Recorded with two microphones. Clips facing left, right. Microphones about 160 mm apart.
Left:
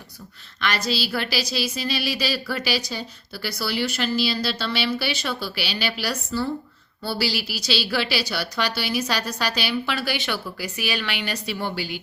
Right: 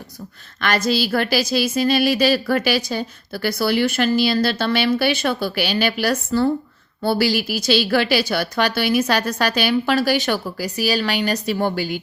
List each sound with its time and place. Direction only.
0.6 s speech: 50° right (ahead or behind)